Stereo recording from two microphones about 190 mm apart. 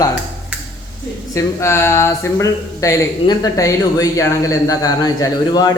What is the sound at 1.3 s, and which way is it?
Speech, 15° left (ahead or behind).